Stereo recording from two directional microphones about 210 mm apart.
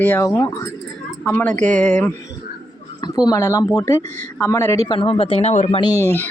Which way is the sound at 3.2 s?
15° left (ahead or behind).